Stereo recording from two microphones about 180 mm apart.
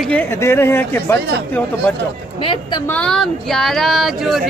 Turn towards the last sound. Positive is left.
turn(degrees=0)  # may be behind; listen again after turning